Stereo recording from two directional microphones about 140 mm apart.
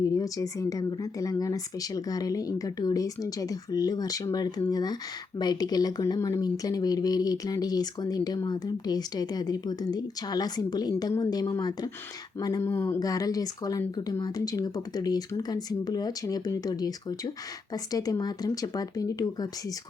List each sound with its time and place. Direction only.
0.2 s speech: 25° left (ahead or behind)